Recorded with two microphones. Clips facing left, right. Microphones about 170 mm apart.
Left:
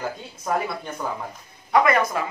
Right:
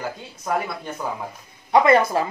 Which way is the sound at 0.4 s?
5° right (ahead or behind).